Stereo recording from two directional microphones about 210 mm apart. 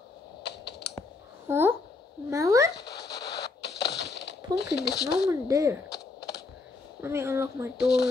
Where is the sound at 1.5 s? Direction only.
10° right (ahead or behind).